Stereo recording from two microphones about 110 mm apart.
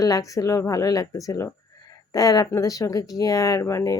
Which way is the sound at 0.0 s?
30° left (ahead or behind).